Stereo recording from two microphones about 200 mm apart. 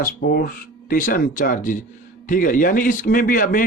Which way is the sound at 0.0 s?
50° left (ahead or behind).